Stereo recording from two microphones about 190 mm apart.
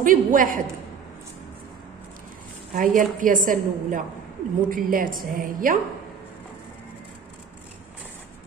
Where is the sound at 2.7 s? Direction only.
45° right (ahead or behind).